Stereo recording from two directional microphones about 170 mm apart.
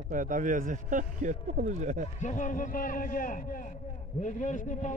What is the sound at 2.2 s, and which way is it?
A man's voice, 45° left (ahead or behind).